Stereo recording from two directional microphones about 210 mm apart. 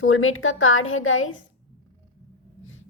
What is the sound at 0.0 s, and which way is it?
A woman's voice, 75° left (ahead or behind).